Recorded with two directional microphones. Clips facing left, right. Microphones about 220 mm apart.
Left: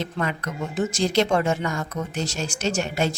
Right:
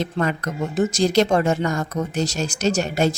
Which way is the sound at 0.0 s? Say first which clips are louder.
Right 4 dB; 40° right (ahead or behind).